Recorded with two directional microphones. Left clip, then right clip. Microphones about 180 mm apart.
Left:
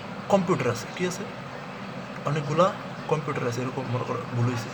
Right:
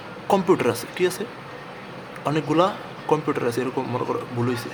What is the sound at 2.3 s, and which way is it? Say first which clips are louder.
Speech: right 3 dB; 50° right (ahead or behind).